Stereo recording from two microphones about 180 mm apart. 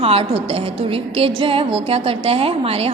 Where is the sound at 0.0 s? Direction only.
35° right (ahead or behind).